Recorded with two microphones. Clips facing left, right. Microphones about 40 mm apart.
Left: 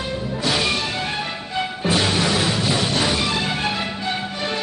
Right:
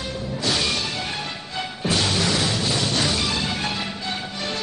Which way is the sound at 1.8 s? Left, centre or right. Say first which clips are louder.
Left 2 dB; left.